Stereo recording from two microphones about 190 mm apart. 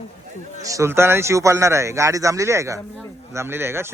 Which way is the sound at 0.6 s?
15° right (ahead or behind).